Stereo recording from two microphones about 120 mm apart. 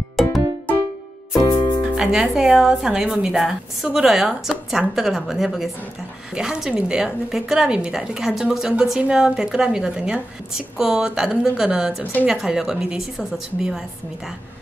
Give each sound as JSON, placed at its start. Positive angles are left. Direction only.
{"t": 0.1, "sound": "music", "side_deg": 0}
{"t": 1.4, "sound": "music", "side_deg": 40}
{"t": 2.0, "sound": "a woman's voice", "side_deg": -5}